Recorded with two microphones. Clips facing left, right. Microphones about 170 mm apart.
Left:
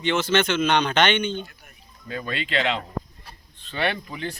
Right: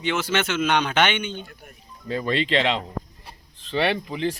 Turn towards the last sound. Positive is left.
turn(degrees=-30)  # may be behind; listen again after turning